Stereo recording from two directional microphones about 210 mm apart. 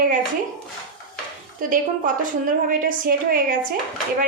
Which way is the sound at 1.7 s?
40° right (ahead or behind).